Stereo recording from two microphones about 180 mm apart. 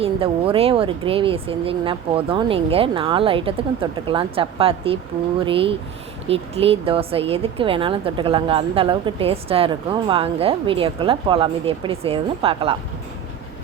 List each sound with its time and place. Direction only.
0.0 s a woman's voice: 30° right (ahead or behind)